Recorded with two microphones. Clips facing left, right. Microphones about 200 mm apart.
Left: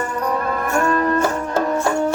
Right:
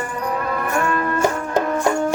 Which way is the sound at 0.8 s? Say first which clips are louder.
Left 4 dB; 35° left (ahead or behind).